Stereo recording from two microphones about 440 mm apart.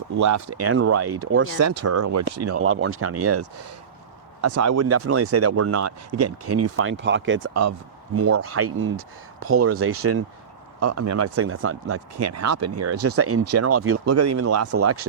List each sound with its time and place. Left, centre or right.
0.2 s speech: right